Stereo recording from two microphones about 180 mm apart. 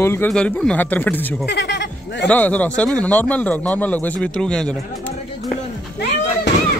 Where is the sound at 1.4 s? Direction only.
70° left (ahead or behind).